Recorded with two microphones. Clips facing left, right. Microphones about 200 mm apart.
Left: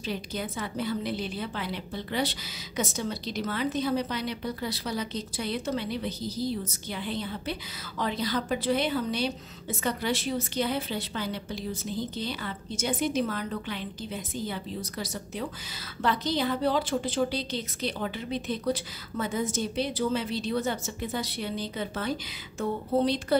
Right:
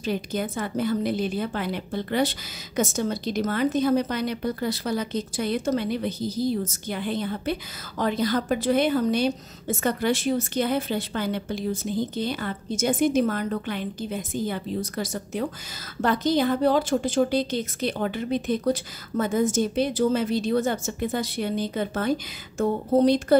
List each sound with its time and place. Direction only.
0.0 s a woman's voice: 50° right (ahead or behind)